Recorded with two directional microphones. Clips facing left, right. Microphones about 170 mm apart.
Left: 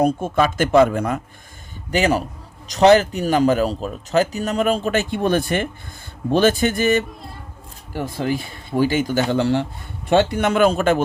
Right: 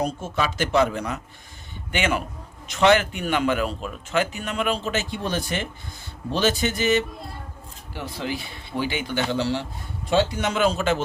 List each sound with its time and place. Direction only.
0.0 s speech: 50° left (ahead or behind)
1.9 s speech: 35° left (ahead or behind); by 11.0 s 55° left (ahead or behind)